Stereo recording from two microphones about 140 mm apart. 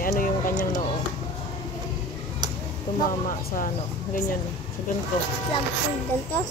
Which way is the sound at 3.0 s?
75° left (ahead or behind).